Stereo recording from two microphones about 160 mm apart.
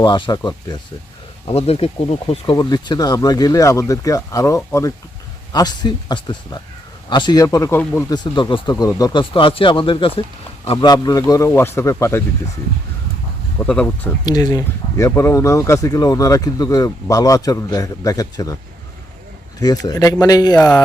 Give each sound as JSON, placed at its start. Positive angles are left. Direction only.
{"t": 0.0, "sound": "speech", "side_deg": 25}
{"t": 1.5, "sound": "speech", "side_deg": 40}
{"t": 8.1, "sound": "speech", "side_deg": 30}
{"t": 8.7, "sound": "speech", "side_deg": 20}
{"t": 9.3, "sound": "speech", "side_deg": 35}
{"t": 13.7, "sound": "speech", "side_deg": 10}
{"t": 14.3, "sound": "speech", "side_deg": 25}
{"t": 19.5, "sound": "speech", "side_deg": 25}